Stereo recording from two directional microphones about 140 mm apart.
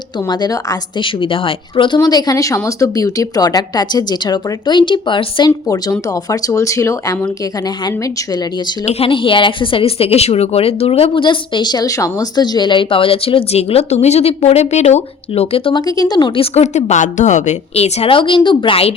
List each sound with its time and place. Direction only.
0.3 s speech: 30° left (ahead or behind)
8.9 s speech: 40° left (ahead or behind)
16.4 s a woman's voice: 55° left (ahead or behind)